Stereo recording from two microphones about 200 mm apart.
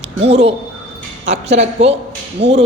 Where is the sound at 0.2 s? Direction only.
30° right (ahead or behind).